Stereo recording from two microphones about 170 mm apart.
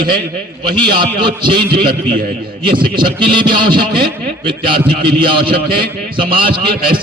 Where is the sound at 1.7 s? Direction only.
60° right (ahead or behind).